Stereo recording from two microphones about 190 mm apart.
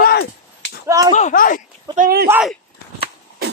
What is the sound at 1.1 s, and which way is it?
Speech, 45° left (ahead or behind).